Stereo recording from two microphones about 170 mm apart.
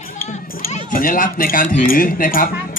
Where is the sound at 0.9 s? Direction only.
55° left (ahead or behind).